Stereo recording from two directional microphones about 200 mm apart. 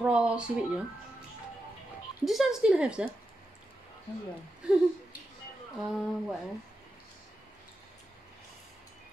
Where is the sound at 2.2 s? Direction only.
Centre (ahead or behind).